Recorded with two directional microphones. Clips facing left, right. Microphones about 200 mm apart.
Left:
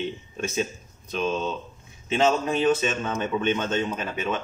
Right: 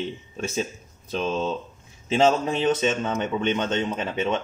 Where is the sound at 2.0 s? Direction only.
30° right (ahead or behind).